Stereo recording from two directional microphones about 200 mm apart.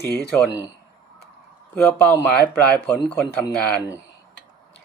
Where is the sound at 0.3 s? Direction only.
10° left (ahead or behind).